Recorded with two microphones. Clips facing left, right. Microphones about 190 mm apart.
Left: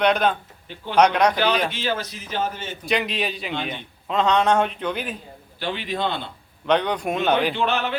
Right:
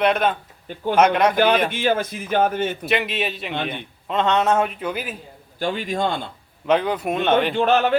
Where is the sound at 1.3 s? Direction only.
50° right (ahead or behind).